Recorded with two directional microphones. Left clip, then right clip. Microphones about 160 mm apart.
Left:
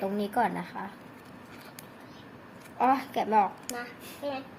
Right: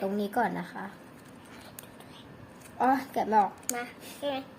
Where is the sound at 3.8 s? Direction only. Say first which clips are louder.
Right 1 dB; 50° right (ahead or behind).